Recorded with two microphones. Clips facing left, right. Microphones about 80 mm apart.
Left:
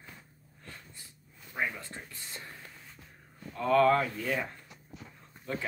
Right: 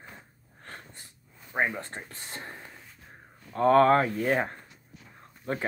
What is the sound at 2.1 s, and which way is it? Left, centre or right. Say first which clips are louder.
Speech: right 5 dB; right.